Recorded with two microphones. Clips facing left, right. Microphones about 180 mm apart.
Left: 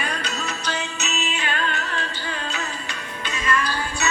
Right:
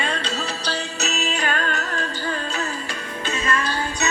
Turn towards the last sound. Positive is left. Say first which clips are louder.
# right 1 dB
turn(degrees=-25)  # may be behind; listen again after turning